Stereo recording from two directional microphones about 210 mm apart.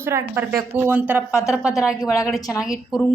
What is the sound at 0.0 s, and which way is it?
A woman's voice, 10° right (ahead or behind).